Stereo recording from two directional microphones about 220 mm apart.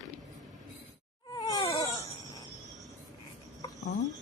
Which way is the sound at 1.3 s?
15° left (ahead or behind).